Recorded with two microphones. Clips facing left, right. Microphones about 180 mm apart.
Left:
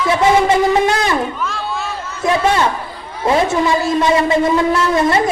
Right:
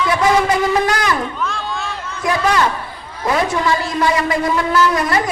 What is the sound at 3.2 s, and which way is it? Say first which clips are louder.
A woman's voice: left 3 dB; 25° left (ahead or behind).